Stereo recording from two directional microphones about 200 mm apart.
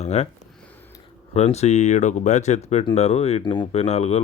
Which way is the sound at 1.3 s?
35° left (ahead or behind).